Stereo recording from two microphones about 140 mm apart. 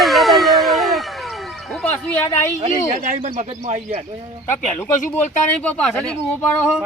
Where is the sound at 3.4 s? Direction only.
50° right (ahead or behind).